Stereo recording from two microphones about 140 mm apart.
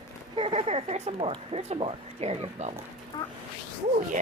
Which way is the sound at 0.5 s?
50° right (ahead or behind).